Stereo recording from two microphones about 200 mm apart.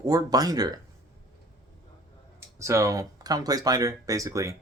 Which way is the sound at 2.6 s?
15° right (ahead or behind).